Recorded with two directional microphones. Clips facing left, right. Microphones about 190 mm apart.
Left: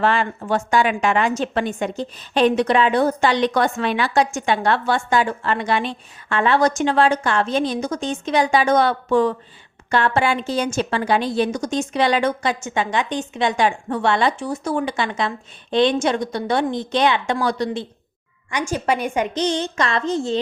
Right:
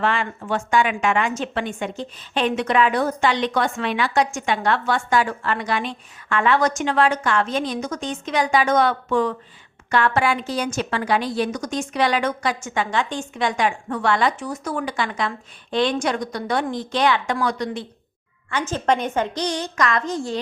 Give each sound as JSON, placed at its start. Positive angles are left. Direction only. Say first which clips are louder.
{"t": 0.0, "sound": "a woman's voice", "louder": "left 3 dB", "side_deg": 40}
{"t": 18.5, "sound": "a woman's voice", "louder": "even", "side_deg": 10}